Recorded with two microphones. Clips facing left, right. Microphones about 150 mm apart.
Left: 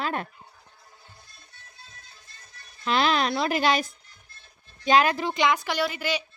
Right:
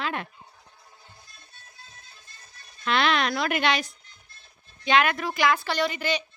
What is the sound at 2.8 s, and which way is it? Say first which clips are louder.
Speech: left 1 dB; 35° left (ahead or behind).